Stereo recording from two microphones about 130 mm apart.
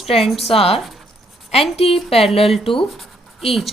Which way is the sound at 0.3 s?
50° left (ahead or behind).